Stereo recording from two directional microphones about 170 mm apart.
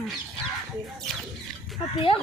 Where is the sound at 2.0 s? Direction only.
35° left (ahead or behind).